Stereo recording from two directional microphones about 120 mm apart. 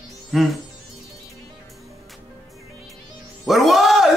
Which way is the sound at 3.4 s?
Centre (ahead or behind).